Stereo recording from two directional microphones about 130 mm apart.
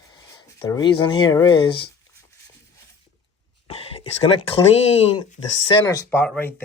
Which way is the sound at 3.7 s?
50° left (ahead or behind).